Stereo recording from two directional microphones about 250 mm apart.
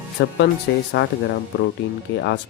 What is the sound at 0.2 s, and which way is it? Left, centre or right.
Speech, left.